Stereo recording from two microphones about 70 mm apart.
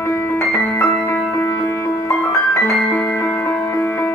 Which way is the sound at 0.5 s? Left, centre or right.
Left.